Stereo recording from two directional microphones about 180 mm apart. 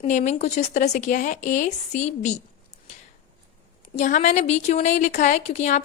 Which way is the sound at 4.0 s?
40° left (ahead or behind).